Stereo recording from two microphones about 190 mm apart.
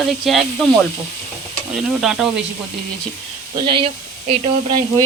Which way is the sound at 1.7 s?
Centre (ahead or behind).